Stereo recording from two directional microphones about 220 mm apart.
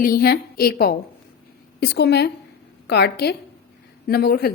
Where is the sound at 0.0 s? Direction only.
40° left (ahead or behind).